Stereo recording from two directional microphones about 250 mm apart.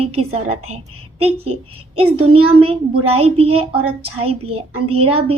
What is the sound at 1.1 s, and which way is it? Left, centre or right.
A woman's voice, right.